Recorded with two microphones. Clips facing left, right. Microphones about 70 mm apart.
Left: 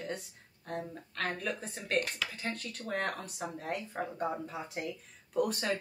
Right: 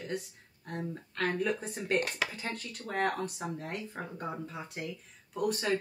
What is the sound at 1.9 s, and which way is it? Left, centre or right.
Speech, right.